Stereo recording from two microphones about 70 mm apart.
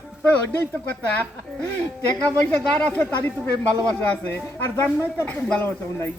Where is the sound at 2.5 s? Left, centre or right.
Centre.